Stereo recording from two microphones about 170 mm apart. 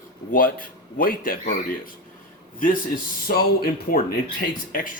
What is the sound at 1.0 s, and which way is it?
Speech, 55° left (ahead or behind).